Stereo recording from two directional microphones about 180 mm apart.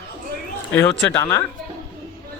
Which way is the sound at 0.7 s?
10° left (ahead or behind).